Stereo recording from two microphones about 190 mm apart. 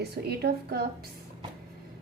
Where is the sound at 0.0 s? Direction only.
55° right (ahead or behind).